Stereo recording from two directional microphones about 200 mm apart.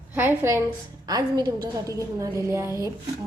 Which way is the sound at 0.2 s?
10° right (ahead or behind).